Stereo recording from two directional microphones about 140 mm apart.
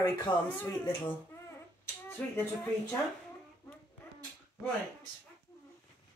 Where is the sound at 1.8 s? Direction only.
15° left (ahead or behind).